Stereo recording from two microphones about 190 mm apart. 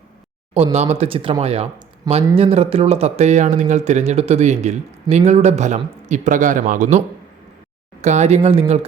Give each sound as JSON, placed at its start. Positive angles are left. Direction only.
{"t": 0.5, "sound": "speech", "side_deg": -35}
{"t": 8.0, "sound": "speech", "side_deg": -35}